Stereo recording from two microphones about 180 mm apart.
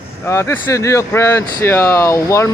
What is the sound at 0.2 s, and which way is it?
Speech, 15° left (ahead or behind).